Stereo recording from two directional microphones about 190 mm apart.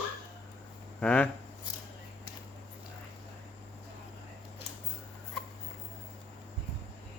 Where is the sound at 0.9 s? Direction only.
5° left (ahead or behind).